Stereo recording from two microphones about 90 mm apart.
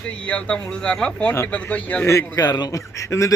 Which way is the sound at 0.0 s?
15° left (ahead or behind).